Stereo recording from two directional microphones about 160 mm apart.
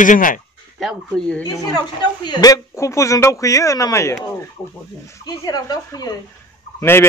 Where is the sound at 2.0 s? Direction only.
25° left (ahead or behind).